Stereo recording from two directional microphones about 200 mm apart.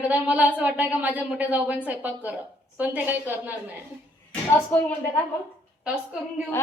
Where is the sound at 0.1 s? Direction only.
5° right (ahead or behind).